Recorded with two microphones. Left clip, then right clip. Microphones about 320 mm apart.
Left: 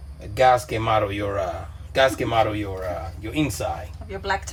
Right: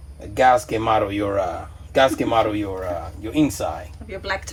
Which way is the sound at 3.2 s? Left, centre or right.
Centre.